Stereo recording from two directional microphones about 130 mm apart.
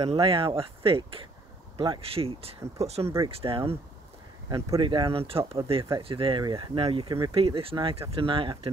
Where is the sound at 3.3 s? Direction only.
45° right (ahead or behind).